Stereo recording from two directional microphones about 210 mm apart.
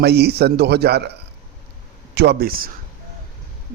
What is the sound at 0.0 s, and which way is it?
A man's voice, 50° right (ahead or behind).